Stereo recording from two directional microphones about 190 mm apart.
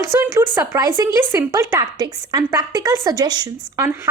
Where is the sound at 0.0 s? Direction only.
15° right (ahead or behind).